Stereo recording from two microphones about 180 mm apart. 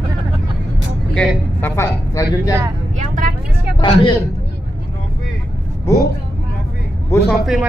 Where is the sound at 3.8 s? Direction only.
25° left (ahead or behind).